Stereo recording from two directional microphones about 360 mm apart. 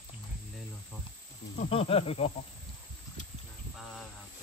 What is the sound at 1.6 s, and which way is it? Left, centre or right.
Insect, centre.